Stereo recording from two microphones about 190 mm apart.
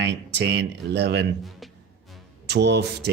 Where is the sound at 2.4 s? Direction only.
60° right (ahead or behind).